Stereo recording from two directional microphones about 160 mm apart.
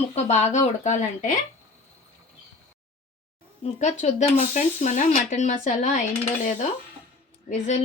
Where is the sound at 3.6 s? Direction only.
45° left (ahead or behind).